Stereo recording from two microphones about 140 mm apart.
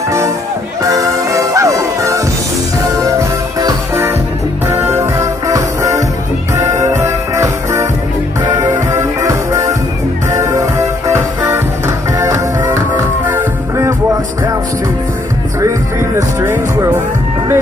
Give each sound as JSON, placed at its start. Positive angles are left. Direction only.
{"t": 0.8, "sound": "music", "side_deg": -25}
{"t": 16.2, "sound": "music", "side_deg": -20}